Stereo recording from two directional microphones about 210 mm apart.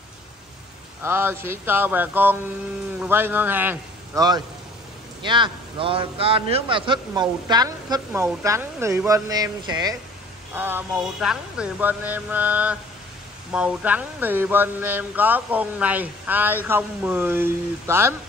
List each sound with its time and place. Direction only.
1.0 s a woman's voice: 10° right (ahead or behind)